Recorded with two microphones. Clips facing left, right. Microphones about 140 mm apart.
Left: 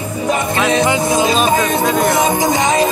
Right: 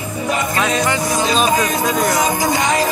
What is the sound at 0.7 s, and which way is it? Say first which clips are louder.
Music: left 4 dB; 25° left (ahead or behind).